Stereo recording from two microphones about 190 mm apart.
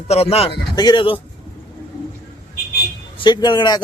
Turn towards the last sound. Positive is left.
turn(degrees=25)  # may be behind; listen again after turning